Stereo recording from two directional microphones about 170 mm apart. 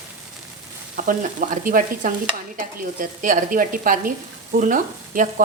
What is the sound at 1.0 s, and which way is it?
Speech, 50° right (ahead or behind).